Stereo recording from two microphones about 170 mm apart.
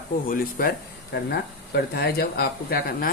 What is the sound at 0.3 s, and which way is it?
Speech, 60° left (ahead or behind).